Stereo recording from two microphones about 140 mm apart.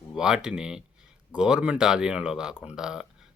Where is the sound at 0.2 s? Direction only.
5° right (ahead or behind).